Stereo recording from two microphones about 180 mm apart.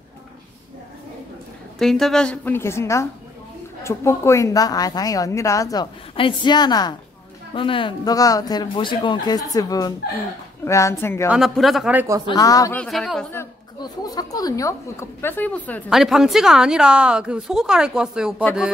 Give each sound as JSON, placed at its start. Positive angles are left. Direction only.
{"t": 1.8, "sound": "a woman's voice", "side_deg": 0}
{"t": 11.2, "sound": "a woman's voice", "side_deg": 0}
{"t": 12.3, "sound": "a woman's voice", "side_deg": 20}
{"t": 12.7, "sound": "a woman's voice", "side_deg": 5}
{"t": 13.8, "sound": "a woman's voice", "side_deg": 20}
{"t": 15.9, "sound": "a woman's voice", "side_deg": 0}